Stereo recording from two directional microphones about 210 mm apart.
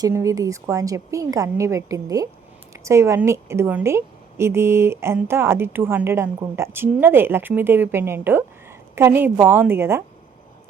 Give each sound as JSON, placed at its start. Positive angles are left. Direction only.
{"t": 0.0, "sound": "a woman's voice", "side_deg": -15}